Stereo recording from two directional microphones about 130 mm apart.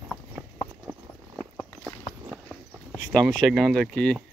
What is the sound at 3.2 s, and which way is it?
Speech, 5° left (ahead or behind).